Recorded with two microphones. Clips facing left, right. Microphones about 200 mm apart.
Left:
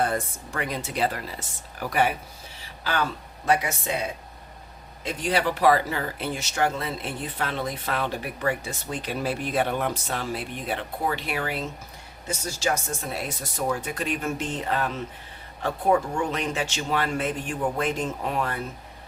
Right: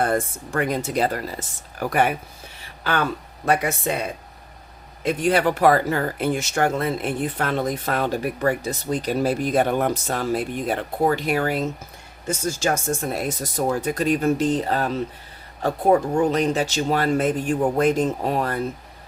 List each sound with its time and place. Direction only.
0.0 s speech: 50° right (ahead or behind)
5.0 s speech: 55° right (ahead or behind)